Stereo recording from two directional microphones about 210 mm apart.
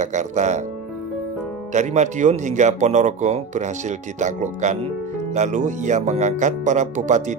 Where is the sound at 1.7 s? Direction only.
35° right (ahead or behind).